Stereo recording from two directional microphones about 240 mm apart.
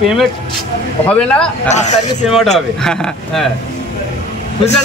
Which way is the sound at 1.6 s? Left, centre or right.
Left.